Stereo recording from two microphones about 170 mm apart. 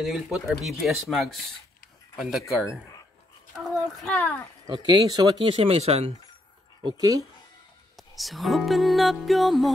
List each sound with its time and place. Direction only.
0.0 s speech: centre (ahead or behind)
2.5 s speech: 5° right (ahead or behind)
4.6 s speech: 25° right (ahead or behind)
6.8 s speech: 25° right (ahead or behind)
8.2 s speech: centre (ahead or behind)